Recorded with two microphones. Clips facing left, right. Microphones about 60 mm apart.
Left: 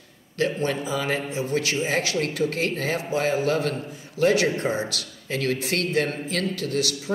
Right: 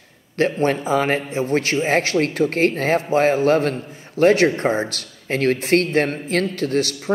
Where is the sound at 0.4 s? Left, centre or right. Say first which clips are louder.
Right 6 dB; right.